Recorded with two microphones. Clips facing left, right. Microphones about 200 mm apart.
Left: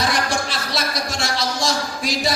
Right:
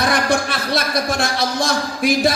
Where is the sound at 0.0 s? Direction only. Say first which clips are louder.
Right 4 dB; 55° right (ahead or behind).